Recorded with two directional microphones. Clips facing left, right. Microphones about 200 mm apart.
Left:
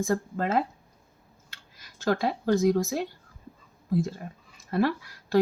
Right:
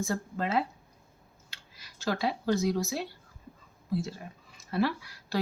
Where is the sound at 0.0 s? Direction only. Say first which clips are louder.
Left 5 dB; 50° left (ahead or behind).